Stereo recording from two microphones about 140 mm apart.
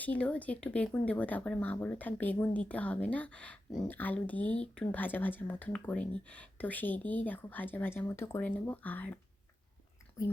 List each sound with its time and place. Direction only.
0.0 s speech: 10° left (ahead or behind)
10.2 s speech: 25° left (ahead or behind)